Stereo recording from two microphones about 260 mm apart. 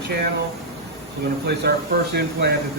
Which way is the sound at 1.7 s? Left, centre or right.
Right.